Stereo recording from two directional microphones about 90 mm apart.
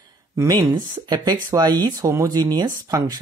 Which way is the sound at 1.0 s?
50° right (ahead or behind).